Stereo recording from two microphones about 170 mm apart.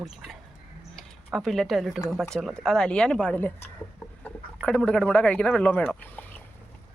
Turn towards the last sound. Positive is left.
turn(degrees=5)  # may be behind; listen again after turning